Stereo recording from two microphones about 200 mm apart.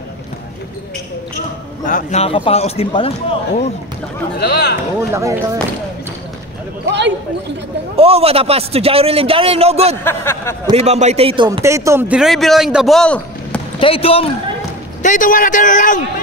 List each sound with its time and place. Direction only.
1.9 s a man's voice: 40° left (ahead or behind)
4.4 s a man's voice: 55° left (ahead or behind)
5.1 s speech: 15° right (ahead or behind)
6.9 s a sound: 60° right (ahead or behind)
7.9 s a man's voice: 30° right (ahead or behind)
10.0 s a sound: 10° left (ahead or behind)
10.7 s a man's voice: 30° right (ahead or behind)
11.6 s a man's voice: 15° right (ahead or behind); by 13.6 s 5° left (ahead or behind)
13.7 s speech: 25° left (ahead or behind)
15.0 s a man's voice: 40° left (ahead or behind)